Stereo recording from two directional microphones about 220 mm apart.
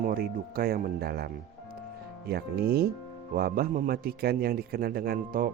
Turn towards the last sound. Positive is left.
turn(degrees=-40)  # may be behind; listen again after turning